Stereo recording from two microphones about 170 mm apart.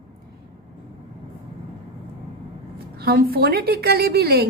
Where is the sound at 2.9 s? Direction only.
65° right (ahead or behind).